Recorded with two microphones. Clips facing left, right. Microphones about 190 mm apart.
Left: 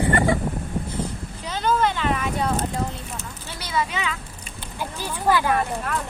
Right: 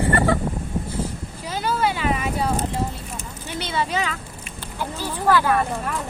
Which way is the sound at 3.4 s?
25° right (ahead or behind).